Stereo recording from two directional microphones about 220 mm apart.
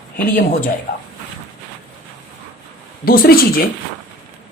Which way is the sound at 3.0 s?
40° left (ahead or behind).